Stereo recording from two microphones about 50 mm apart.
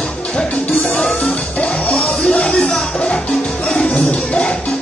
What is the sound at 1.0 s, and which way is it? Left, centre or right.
Music, centre.